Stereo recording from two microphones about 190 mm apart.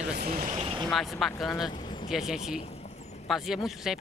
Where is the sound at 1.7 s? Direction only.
25° left (ahead or behind).